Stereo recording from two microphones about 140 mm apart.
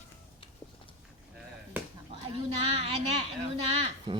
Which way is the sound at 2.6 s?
45° right (ahead or behind).